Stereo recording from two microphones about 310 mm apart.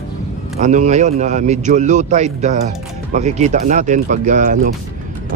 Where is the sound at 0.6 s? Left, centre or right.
Right.